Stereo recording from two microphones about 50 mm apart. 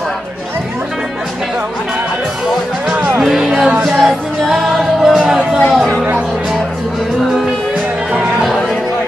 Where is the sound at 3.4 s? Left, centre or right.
Centre.